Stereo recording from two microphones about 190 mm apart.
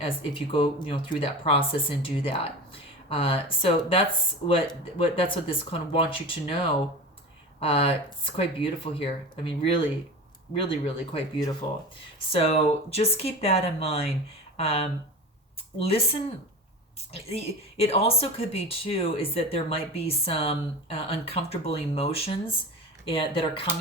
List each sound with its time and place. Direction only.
0.0 s speech: 30° left (ahead or behind)
5.1 s speech: 30° left (ahead or behind)
17.2 s speech: 30° left (ahead or behind)